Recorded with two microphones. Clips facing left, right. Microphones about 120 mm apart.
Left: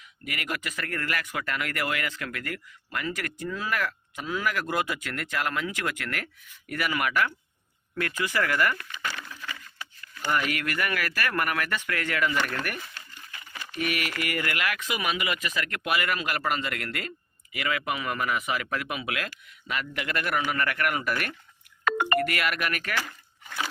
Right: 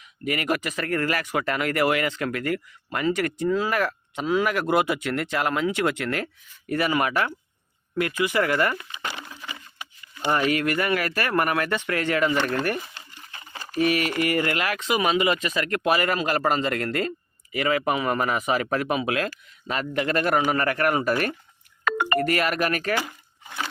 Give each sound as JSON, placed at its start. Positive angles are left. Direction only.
{"t": 0.3, "sound": "speech", "side_deg": -25}
{"t": 7.9, "sound": "speech", "side_deg": -20}
{"t": 9.0, "sound": "a sound", "side_deg": -25}
{"t": 10.3, "sound": "speech", "side_deg": -30}
{"t": 23.0, "sound": "crumpling", "side_deg": -20}